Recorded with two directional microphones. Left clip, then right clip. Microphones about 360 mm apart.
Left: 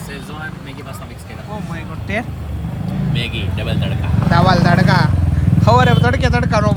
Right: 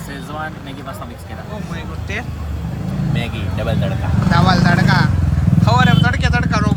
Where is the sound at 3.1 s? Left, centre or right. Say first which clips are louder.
Left 2 dB; right.